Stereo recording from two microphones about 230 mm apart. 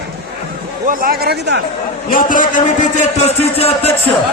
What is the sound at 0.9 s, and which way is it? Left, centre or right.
Speech, right.